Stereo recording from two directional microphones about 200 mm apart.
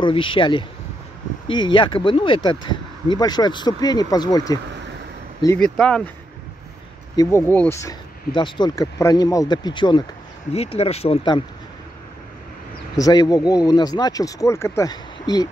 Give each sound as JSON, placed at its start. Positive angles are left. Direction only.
{"t": 0.0, "sound": "speech", "side_deg": 25}
{"t": 5.6, "sound": "speech", "side_deg": 5}
{"t": 7.2, "sound": "speech", "side_deg": 15}
{"t": 12.9, "sound": "speech", "side_deg": 20}